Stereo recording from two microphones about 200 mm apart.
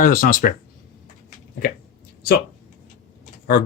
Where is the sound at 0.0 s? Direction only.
45° left (ahead or behind).